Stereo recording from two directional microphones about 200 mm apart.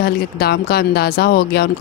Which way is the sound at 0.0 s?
50° left (ahead or behind).